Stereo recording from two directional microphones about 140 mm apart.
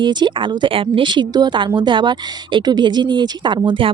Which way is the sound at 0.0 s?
30° right (ahead or behind).